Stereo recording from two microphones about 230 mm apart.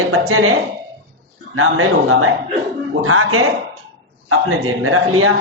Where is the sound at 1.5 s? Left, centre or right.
Right.